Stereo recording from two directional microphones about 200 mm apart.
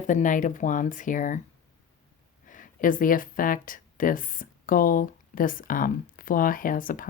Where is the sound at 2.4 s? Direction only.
40° left (ahead or behind).